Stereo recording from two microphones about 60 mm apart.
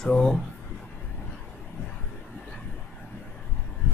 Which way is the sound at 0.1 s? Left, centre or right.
Centre.